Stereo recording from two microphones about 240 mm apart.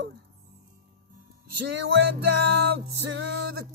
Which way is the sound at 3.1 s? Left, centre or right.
Right.